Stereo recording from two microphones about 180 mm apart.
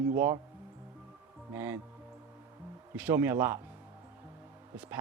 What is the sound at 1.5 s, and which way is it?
Speech, 10° right (ahead or behind).